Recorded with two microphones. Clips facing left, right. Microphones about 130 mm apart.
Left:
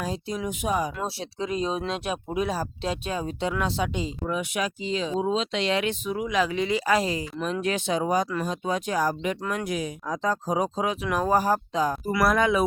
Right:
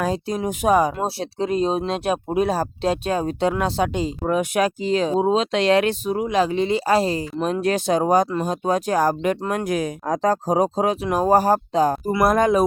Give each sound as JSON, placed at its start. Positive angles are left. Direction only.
{"t": 0.3, "sound": "speech", "side_deg": -45}
{"t": 0.7, "sound": "speech", "side_deg": -65}
{"t": 0.9, "sound": "speech", "side_deg": -35}
{"t": 2.3, "sound": "speech", "side_deg": -60}